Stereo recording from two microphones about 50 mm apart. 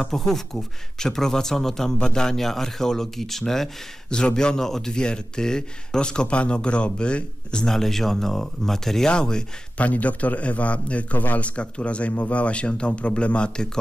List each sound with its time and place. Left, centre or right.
0.0 s speech: centre
4.1 s speech: centre
7.6 s speech: centre
9.8 s speech: left